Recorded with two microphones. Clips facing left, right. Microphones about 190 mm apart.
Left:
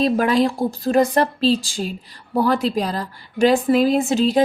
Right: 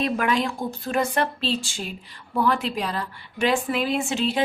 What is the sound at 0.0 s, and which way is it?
A woman's voice, 35° left (ahead or behind).